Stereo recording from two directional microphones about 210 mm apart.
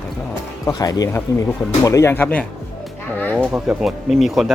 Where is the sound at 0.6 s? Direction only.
15° left (ahead or behind).